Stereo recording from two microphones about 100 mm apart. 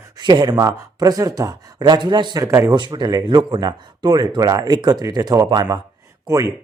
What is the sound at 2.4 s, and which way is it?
Speech, 30° right (ahead or behind).